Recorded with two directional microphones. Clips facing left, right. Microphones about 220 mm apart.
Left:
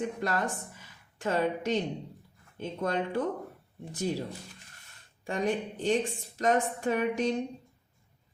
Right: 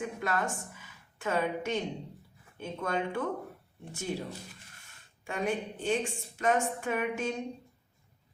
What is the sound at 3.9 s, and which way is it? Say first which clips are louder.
Speech: left 4 dB; 35° left (ahead or behind).